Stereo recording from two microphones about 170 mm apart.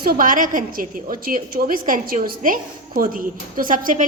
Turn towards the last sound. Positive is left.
turn(degrees=-50)  # may be behind; listen again after turning